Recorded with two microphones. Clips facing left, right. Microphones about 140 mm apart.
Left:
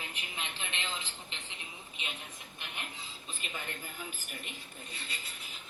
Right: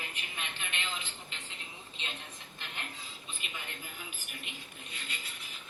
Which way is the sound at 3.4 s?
40° left (ahead or behind).